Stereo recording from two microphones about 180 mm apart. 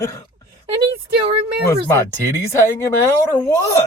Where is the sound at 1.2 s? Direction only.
30° right (ahead or behind).